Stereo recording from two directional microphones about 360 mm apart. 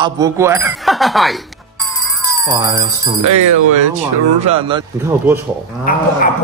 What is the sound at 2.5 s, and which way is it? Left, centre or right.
Speech, centre.